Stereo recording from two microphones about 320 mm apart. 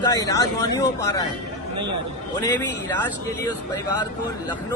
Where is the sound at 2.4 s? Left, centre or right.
Centre.